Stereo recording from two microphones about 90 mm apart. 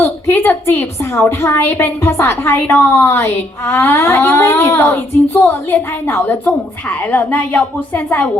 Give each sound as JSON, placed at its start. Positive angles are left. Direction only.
{"t": 0.0, "sound": "a woman's voice", "side_deg": 25}